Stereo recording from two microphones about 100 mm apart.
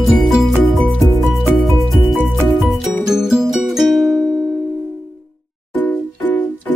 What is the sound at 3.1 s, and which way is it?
Music, 5° right (ahead or behind).